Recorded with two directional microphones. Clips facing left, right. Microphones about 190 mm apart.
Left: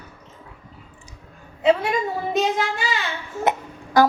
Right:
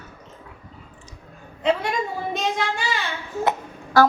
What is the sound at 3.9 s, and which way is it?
Speech, 15° left (ahead or behind).